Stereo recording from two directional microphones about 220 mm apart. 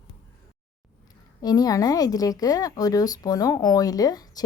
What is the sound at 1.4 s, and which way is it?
Speech, 15° left (ahead or behind).